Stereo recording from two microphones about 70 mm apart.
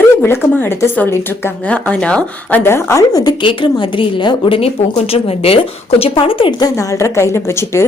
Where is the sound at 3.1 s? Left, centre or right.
Left.